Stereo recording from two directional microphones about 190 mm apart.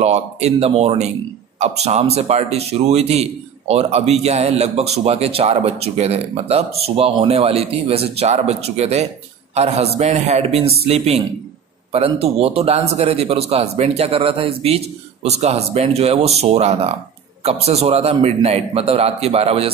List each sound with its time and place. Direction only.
0.0 s a man's voice: 35° right (ahead or behind)